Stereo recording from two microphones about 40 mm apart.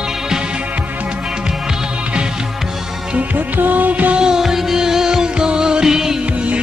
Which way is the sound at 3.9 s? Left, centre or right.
Right.